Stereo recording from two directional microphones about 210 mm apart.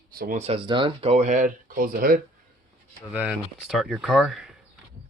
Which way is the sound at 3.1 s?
5° right (ahead or behind).